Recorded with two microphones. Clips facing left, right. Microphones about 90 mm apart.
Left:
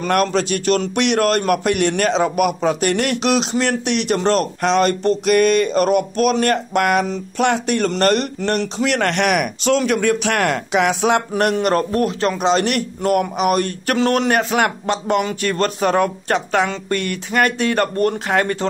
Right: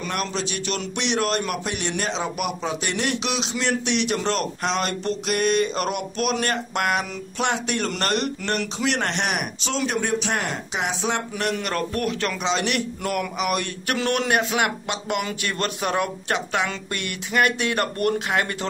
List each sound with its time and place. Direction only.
0.1 s a man's voice: 55° left (ahead or behind)
11.5 s speech: 35° left (ahead or behind)
12.4 s speech: 45° left (ahead or behind)